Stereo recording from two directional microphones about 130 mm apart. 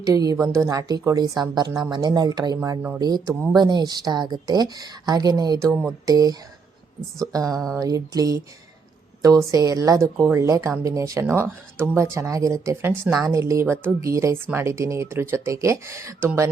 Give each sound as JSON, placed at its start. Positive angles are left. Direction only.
{"t": 0.0, "sound": "a woman's voice", "side_deg": -30}
{"t": 7.4, "sound": "speech", "side_deg": 5}
{"t": 7.8, "sound": "speech", "side_deg": -30}